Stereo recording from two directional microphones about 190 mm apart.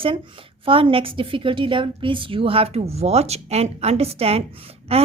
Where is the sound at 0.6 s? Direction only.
30° right (ahead or behind).